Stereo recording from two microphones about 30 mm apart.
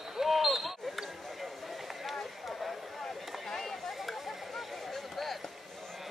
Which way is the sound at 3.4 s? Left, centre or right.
Centre.